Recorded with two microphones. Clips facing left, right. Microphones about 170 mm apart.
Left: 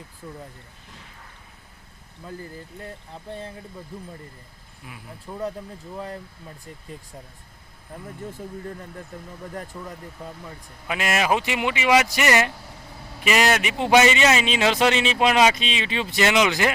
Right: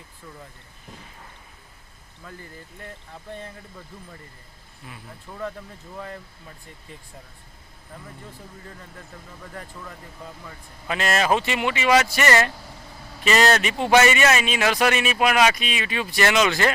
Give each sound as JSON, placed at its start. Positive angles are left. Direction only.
{"t": 2.2, "sound": "speech", "side_deg": 30}
{"t": 4.9, "sound": "speech", "side_deg": 10}
{"t": 5.3, "sound": "a man's voice", "side_deg": 25}
{"t": 10.4, "sound": "a man's voice", "side_deg": 10}